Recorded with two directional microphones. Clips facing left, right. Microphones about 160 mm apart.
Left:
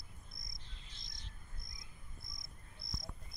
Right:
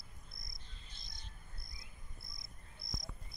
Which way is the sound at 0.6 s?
90° left.